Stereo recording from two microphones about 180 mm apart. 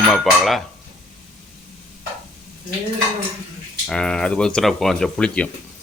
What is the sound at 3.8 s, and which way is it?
Speech, 5° left (ahead or behind).